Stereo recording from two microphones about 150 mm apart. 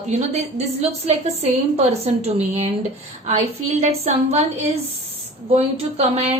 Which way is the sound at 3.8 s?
45° right (ahead or behind).